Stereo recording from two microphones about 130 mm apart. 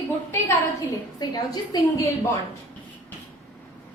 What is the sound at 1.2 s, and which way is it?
Speech, 30° left (ahead or behind).